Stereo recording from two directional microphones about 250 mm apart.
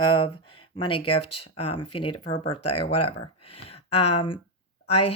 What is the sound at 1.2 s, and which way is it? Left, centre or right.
Speech, left.